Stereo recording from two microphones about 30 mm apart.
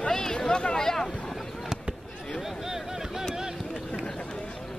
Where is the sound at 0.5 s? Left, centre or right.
Left.